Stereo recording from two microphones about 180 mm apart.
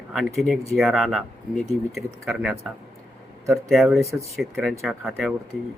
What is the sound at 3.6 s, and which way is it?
Speech, centre (ahead or behind).